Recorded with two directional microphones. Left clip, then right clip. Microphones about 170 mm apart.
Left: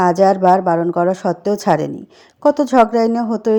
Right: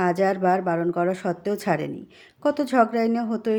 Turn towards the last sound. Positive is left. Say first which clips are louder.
# left 8 dB
turn(degrees=30)  # may be behind; listen again after turning